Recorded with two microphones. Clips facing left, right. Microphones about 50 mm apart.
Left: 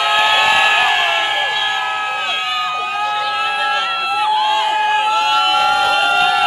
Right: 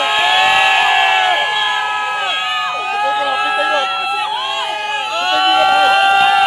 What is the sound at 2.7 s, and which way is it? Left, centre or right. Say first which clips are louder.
Run: right 1 dB; centre.